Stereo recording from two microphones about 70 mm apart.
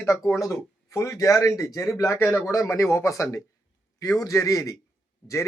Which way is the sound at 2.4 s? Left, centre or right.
Left.